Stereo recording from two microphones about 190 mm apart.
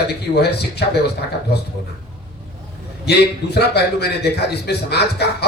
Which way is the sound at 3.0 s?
60° left (ahead or behind).